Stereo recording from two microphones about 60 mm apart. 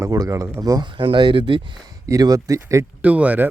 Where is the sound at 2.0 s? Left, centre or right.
Right.